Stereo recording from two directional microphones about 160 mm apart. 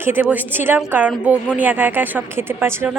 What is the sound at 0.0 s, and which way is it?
Speech, 10° right (ahead or behind).